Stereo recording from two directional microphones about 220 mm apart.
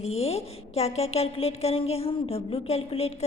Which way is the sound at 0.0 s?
30° left (ahead or behind).